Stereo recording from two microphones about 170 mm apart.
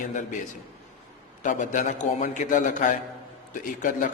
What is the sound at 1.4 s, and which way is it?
A man's voice, 50° left (ahead or behind).